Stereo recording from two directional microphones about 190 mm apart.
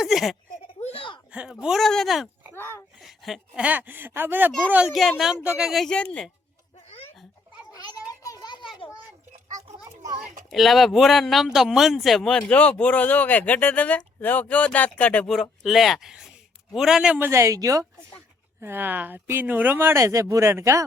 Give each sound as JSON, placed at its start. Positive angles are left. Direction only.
{"t": 0.0, "sound": "a sound", "side_deg": 0}
{"t": 0.8, "sound": "a sound", "side_deg": 30}
{"t": 1.3, "sound": "speech", "side_deg": -5}
{"t": 2.6, "sound": "speech", "side_deg": 10}
{"t": 3.0, "sound": "speech", "side_deg": 0}
{"t": 8.2, "sound": "children playing", "side_deg": 20}
{"t": 9.6, "sound": "children playing", "side_deg": -35}
{"t": 10.5, "sound": "speech", "side_deg": 0}